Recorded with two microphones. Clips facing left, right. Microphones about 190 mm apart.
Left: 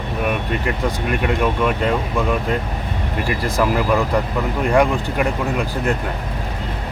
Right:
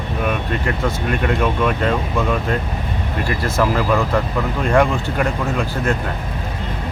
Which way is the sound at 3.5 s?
10° left (ahead or behind).